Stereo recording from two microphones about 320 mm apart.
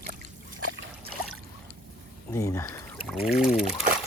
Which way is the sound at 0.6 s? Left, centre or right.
Right.